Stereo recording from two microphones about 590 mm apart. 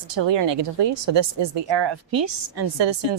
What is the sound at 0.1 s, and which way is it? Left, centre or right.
A woman's voice, right.